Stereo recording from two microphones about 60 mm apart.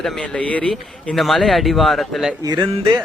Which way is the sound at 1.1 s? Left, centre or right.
Centre.